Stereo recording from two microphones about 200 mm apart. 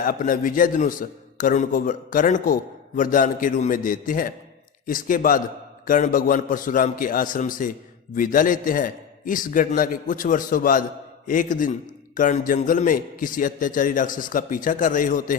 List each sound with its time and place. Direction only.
0.0 s a man's voice: 45° left (ahead or behind)